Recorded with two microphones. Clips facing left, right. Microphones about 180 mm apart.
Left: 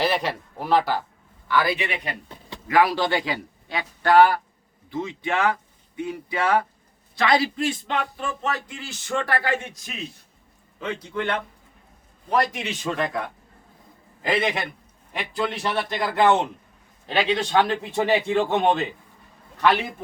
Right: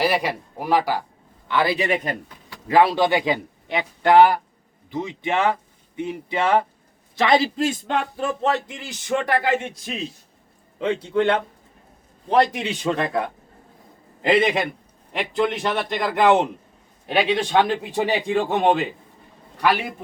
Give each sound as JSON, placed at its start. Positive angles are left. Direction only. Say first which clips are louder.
{"t": 0.0, "sound": "speech", "louder": "right 2 dB", "side_deg": -10}
{"t": 1.5, "sound": "a man's voice", "louder": "right 3 dB", "side_deg": -25}
{"t": 2.6, "sound": "speech", "louder": "right 3 dB", "side_deg": -25}
{"t": 7.6, "sound": "a man's voice", "louder": "right 3 dB", "side_deg": -40}